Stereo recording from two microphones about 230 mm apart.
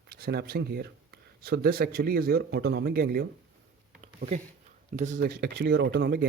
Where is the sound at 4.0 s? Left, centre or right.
Right.